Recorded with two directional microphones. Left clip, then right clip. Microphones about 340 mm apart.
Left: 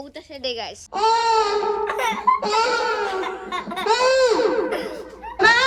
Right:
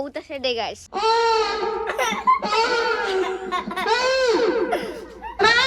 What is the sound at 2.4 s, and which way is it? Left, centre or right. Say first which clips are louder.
Laughter: even; centre.